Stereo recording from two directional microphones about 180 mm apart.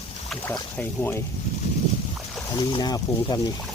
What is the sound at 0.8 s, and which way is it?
Speech, 10° left (ahead or behind).